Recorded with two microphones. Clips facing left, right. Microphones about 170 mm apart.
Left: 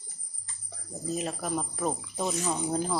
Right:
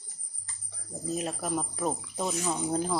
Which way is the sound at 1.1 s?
Centre (ahead or behind).